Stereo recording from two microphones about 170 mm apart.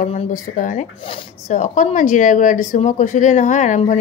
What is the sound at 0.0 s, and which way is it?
A woman's voice, 45° left (ahead or behind).